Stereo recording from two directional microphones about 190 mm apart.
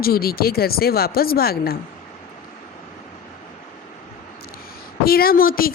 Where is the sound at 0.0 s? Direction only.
55° left (ahead or behind).